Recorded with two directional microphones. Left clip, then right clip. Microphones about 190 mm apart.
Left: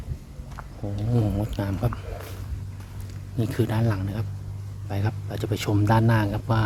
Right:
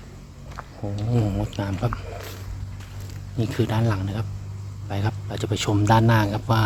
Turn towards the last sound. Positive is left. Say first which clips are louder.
# right 3 dB
turn(degrees=-5)  # may be behind; listen again after turning